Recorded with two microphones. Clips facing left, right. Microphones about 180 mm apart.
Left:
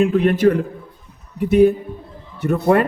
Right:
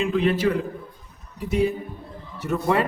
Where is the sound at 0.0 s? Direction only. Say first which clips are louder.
Left 7 dB; 50° left (ahead or behind).